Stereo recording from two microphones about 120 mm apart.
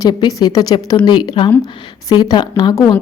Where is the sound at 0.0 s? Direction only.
35° left (ahead or behind).